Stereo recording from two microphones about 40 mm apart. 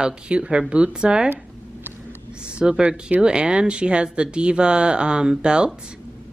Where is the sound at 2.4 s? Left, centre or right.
Right.